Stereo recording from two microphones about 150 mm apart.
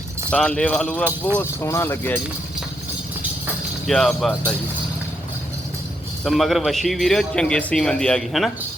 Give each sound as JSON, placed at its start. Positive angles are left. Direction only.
{"t": 0.3, "sound": "a man's voice", "side_deg": 5}
{"t": 1.4, "sound": "a man's voice", "side_deg": 20}
{"t": 3.8, "sound": "speech", "side_deg": 0}
{"t": 6.2, "sound": "speech", "side_deg": 0}